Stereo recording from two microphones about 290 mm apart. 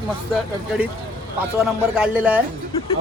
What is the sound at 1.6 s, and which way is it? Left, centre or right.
Speech, centre.